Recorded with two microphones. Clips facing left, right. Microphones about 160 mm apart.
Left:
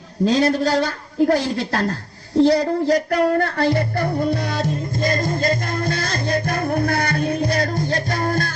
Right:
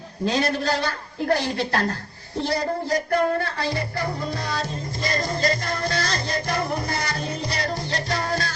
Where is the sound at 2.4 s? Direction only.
90° left.